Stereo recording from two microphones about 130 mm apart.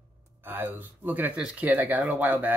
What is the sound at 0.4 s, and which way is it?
Speech, 15° right (ahead or behind).